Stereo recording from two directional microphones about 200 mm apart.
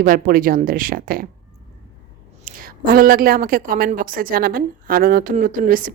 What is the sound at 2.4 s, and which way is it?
A woman's voice, 45° right (ahead or behind).